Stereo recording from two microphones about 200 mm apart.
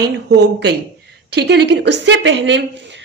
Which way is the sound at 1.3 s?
55° right (ahead or behind).